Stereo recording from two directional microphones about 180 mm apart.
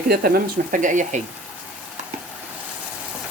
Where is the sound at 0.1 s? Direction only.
55° right (ahead or behind).